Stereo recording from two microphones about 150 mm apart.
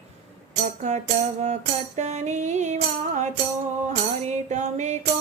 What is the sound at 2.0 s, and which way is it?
Music, 50° right (ahead or behind).